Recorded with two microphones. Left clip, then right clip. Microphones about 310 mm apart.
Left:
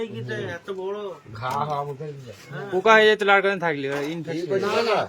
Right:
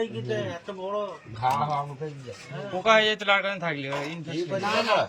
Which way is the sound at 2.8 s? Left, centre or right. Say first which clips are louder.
Left 5 dB; centre.